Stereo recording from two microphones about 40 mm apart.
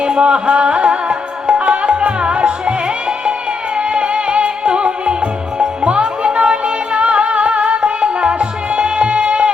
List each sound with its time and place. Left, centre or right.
0.0 s music: right
3.8 s music: right